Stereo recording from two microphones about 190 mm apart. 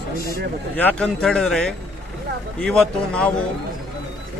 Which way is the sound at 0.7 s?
5° left (ahead or behind).